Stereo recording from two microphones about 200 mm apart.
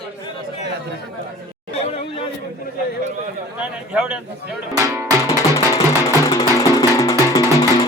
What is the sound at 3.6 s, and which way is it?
Speech, 5° right (ahead or behind).